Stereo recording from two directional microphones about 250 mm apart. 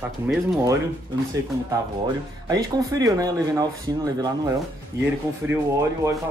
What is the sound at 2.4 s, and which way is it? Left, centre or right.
A woman's voice, centre.